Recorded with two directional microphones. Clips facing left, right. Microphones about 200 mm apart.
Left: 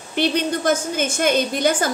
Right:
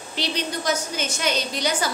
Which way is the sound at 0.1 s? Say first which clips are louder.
Left 8 dB; 55° left (ahead or behind).